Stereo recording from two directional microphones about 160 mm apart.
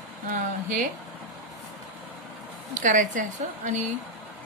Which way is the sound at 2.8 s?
55° right (ahead or behind).